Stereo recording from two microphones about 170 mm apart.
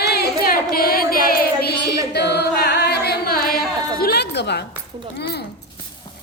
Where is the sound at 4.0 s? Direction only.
65° left (ahead or behind).